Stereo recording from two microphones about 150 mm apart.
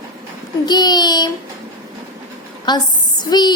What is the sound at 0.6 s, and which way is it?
Speech, 25° left (ahead or behind).